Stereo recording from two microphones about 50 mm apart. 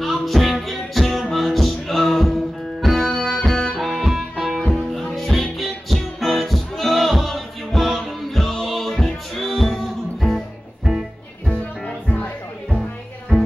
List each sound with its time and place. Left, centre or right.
0.0 s music: centre
3.8 s music: centre
11.8 s music: left
13.3 s music: centre